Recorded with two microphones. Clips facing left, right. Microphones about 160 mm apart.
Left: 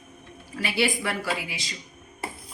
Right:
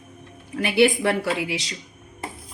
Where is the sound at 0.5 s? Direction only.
55° right (ahead or behind).